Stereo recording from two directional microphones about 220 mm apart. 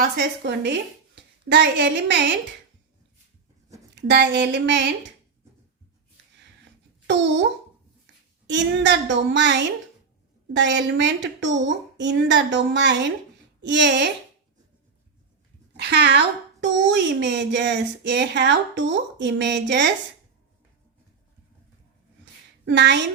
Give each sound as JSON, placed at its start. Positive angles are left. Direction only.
{"t": 0.0, "sound": "speech", "side_deg": -45}
{"t": 3.9, "sound": "speech", "side_deg": -50}
{"t": 7.1, "sound": "speech", "side_deg": -55}
{"t": 8.4, "sound": "speech", "side_deg": -55}
{"t": 15.8, "sound": "speech", "side_deg": -50}
{"t": 22.6, "sound": "a woman's voice", "side_deg": -50}